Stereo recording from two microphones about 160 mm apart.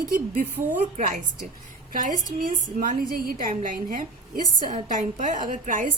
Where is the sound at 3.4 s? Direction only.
50° right (ahead or behind).